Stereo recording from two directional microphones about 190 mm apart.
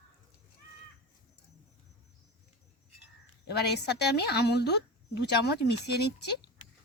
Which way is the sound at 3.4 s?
60° left (ahead or behind).